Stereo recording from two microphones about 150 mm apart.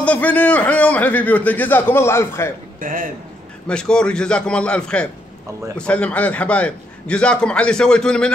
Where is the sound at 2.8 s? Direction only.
60° right (ahead or behind).